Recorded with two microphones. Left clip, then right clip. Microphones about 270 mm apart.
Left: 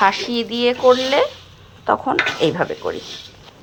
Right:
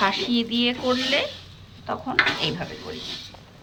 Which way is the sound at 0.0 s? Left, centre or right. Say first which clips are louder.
Left 6 dB; centre.